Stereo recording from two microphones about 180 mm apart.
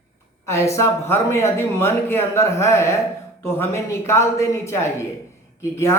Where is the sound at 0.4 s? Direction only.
15° left (ahead or behind).